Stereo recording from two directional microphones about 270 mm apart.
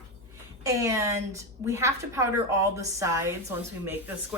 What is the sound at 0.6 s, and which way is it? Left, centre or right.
A woman's voice, centre.